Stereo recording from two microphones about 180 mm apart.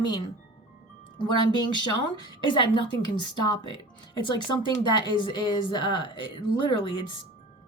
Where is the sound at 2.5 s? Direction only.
25° left (ahead or behind).